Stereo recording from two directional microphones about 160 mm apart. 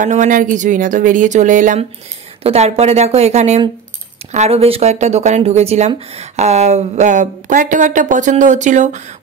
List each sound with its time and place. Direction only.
0.0 s speech: 50° right (ahead or behind)
2.4 s speech: 40° right (ahead or behind)